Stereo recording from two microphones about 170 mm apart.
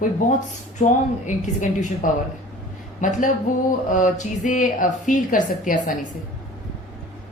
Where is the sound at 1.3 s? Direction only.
45° left (ahead or behind).